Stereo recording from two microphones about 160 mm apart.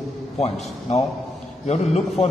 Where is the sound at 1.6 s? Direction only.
45° left (ahead or behind).